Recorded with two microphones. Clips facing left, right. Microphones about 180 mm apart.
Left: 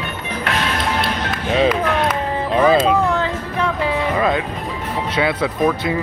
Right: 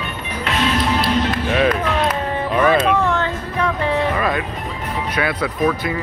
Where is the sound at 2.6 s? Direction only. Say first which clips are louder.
Left 2 dB; 25° left (ahead or behind).